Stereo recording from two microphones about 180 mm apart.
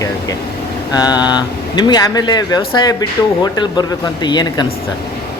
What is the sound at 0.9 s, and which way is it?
Speech, 20° left (ahead or behind).